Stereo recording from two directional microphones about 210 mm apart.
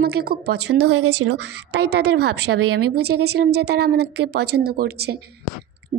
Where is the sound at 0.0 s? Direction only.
45° right (ahead or behind).